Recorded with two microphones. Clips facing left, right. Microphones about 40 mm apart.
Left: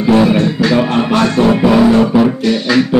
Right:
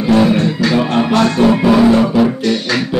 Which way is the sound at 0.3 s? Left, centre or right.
Centre.